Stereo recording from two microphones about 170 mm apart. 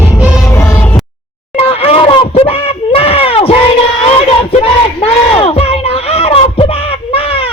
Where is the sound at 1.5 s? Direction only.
35° left (ahead or behind).